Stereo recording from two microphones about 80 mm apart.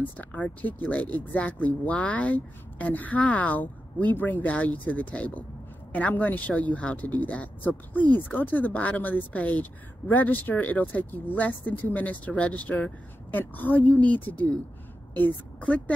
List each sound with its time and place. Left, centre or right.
0.2 s a woman's voice: centre